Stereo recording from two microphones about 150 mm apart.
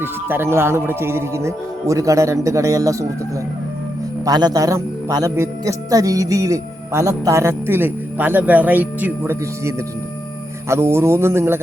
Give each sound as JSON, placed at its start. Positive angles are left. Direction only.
{"t": 0.0, "sound": "a man's voice", "side_deg": -15}
{"t": 4.3, "sound": "a man's voice", "side_deg": -25}